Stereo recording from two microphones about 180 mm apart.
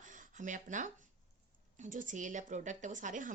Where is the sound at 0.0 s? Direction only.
45° right (ahead or behind).